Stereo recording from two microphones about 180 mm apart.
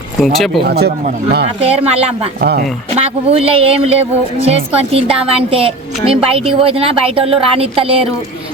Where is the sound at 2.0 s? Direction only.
35° right (ahead or behind).